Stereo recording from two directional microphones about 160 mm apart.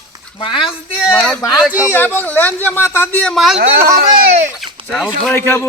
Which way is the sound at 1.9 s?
10° left (ahead or behind).